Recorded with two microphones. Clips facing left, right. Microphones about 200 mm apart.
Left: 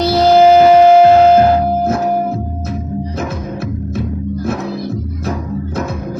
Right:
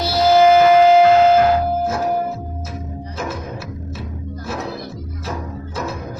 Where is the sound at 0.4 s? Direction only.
30° left (ahead or behind).